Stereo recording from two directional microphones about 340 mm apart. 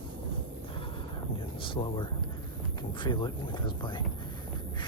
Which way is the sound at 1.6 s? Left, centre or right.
Centre.